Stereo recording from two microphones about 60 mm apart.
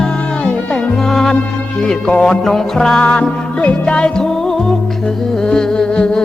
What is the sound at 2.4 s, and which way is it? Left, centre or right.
Music, centre.